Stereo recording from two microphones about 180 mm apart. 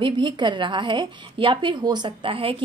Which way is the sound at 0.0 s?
25° right (ahead or behind).